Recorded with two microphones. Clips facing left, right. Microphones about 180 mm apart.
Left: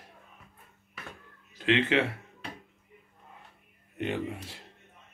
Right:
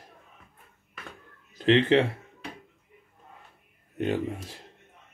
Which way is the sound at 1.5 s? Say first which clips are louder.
Right 5 dB; 40° right (ahead or behind).